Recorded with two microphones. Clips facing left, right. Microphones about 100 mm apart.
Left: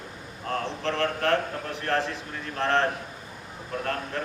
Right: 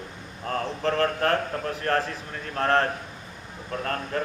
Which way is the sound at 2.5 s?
45° right (ahead or behind).